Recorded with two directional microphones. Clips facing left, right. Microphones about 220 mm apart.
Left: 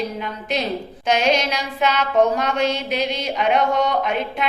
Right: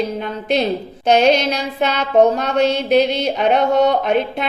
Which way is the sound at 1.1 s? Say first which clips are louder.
Right 5 dB; 35° right (ahead or behind).